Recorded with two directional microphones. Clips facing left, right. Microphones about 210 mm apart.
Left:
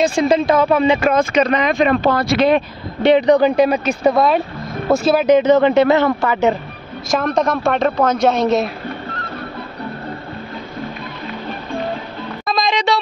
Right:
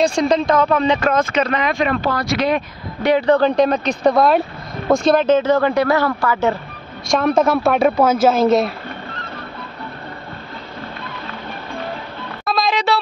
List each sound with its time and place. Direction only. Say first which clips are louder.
0.0 s speech: left 1 dB; 5° left (ahead or behind)
7.2 s a woman's voice: right 3 dB; 5° right (ahead or behind)
12.4 s music: even; 5° right (ahead or behind)